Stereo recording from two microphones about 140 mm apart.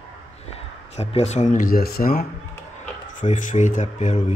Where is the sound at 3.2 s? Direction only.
65° left (ahead or behind).